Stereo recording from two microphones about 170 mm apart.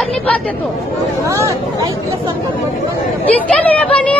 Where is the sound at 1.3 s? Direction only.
20° right (ahead or behind).